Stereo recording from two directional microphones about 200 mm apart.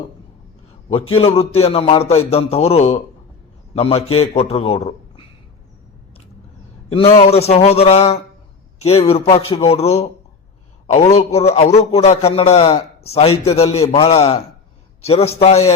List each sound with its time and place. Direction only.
1.1 s a man's voice: 30° left (ahead or behind)
6.9 s a man's voice: 30° left (ahead or behind)